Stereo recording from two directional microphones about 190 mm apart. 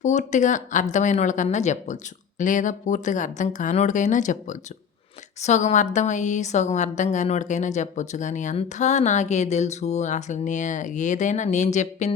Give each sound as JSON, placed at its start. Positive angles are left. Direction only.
{"t": 0.0, "sound": "a woman's voice", "side_deg": 40}